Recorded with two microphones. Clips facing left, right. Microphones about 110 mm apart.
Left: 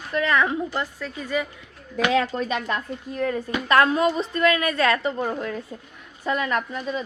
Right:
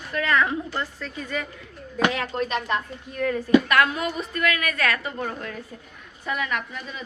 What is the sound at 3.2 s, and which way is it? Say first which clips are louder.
A woman's voice: right 6 dB; 20° left (ahead or behind).